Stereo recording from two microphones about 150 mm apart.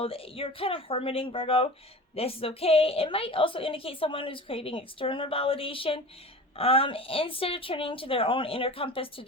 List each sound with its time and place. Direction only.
0.0 s a woman's voice: 40° left (ahead or behind)